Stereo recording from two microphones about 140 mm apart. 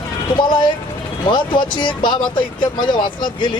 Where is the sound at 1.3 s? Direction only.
35° left (ahead or behind).